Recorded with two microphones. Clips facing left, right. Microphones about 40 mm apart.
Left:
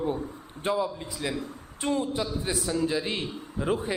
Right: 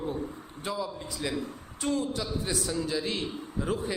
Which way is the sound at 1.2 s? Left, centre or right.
Centre.